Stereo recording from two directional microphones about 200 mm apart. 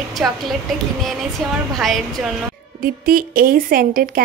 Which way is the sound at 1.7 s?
Centre (ahead or behind).